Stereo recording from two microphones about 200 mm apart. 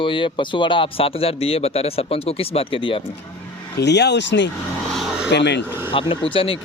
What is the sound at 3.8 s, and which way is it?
Speech, 60° left (ahead or behind).